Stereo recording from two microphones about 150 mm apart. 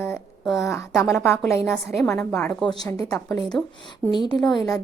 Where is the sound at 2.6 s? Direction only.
25° left (ahead or behind).